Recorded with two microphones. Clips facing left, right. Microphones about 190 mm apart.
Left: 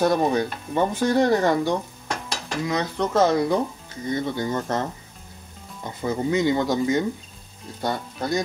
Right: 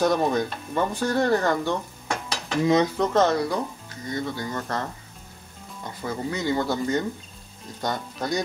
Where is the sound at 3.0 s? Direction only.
5° left (ahead or behind).